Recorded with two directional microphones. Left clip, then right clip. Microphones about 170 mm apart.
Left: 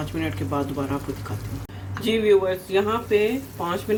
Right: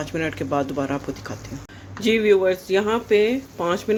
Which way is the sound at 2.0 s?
60° right (ahead or behind).